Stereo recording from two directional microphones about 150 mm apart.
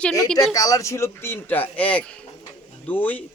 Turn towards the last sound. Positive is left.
turn(degrees=10)  # may be behind; listen again after turning